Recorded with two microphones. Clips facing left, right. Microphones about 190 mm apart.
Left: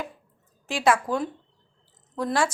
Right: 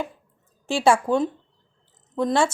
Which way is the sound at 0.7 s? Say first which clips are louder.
Right 4 dB; 30° right (ahead or behind).